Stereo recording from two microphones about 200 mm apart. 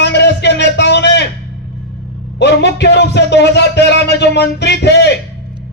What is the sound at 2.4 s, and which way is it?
A man's voice, 60° left (ahead or behind).